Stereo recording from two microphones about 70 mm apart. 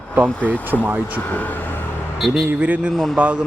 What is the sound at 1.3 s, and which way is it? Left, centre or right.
Speech, left.